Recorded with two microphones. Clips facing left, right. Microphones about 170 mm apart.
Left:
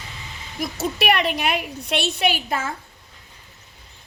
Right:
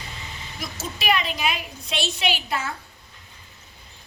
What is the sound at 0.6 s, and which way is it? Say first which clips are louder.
A woman's voice: left 7 dB; 65° left (ahead or behind).